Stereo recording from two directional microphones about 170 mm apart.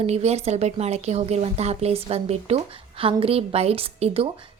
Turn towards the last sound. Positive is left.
turn(degrees=-35)  # may be behind; listen again after turning